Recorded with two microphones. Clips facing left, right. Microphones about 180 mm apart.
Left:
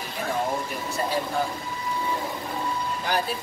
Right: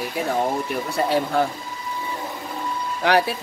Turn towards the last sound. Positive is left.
turn(degrees=-75)  # may be behind; listen again after turning